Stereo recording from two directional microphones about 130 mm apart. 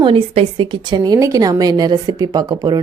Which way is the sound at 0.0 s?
40° right (ahead or behind).